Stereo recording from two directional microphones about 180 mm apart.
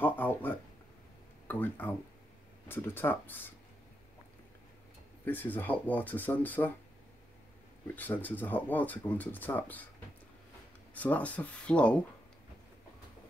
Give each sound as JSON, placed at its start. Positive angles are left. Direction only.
{"t": 0.0, "sound": "a sound", "side_deg": 10}
{"t": 2.7, "sound": "speech", "side_deg": 10}
{"t": 5.2, "sound": "speech", "side_deg": 10}
{"t": 7.8, "sound": "speech", "side_deg": 10}
{"t": 11.0, "sound": "speech", "side_deg": 10}